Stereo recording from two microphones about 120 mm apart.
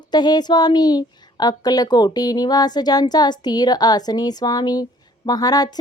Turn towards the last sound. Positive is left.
turn(degrees=35)  # may be behind; listen again after turning